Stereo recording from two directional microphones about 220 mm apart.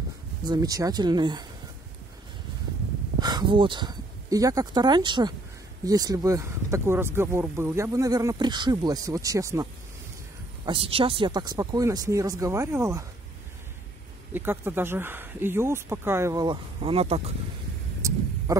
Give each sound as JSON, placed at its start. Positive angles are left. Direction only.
{"t": 0.5, "sound": "speech", "side_deg": -15}
{"t": 3.2, "sound": "speech", "side_deg": -20}
{"t": 14.3, "sound": "speech", "side_deg": -10}
{"t": 18.5, "sound": "a sound", "side_deg": -15}